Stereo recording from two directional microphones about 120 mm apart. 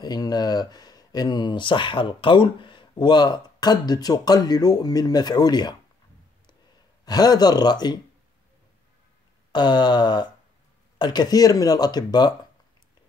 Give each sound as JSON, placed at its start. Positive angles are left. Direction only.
{"t": 0.0, "sound": "speech", "side_deg": 35}
{"t": 7.1, "sound": "speech", "side_deg": 35}
{"t": 9.5, "sound": "speech", "side_deg": 40}